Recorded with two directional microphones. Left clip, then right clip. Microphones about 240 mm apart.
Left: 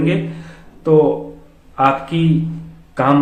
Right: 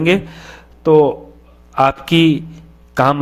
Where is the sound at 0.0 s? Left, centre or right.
Right.